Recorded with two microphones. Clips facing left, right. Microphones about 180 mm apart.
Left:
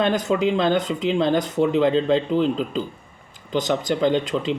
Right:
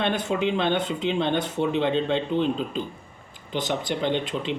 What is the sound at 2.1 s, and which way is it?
Speech, 90° left.